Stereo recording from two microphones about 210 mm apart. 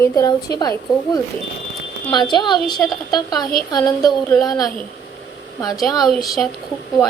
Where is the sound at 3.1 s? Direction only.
20° left (ahead or behind).